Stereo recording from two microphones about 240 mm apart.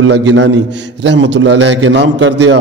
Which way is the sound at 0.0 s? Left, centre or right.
Right.